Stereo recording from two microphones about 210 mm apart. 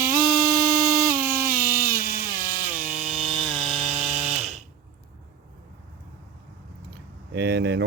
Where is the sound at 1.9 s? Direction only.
45° right (ahead or behind).